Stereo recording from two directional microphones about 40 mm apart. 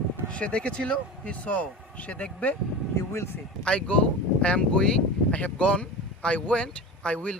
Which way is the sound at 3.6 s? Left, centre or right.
Left.